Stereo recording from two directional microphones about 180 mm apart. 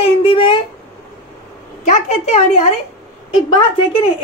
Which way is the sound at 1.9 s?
35° left (ahead or behind).